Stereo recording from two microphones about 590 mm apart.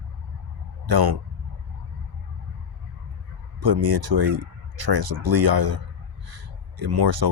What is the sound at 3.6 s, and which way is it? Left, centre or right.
Speech, right.